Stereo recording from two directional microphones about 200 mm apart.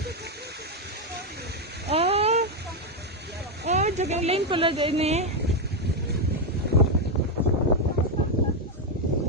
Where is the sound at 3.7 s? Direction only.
35° right (ahead or behind).